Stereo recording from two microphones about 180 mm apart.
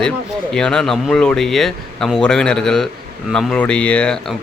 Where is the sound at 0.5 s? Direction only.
5° left (ahead or behind).